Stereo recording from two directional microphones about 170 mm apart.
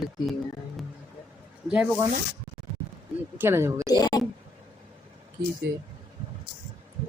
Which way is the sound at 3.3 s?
15° right (ahead or behind).